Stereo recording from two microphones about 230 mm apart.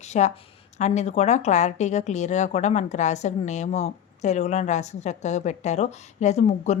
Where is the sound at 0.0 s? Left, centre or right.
Left.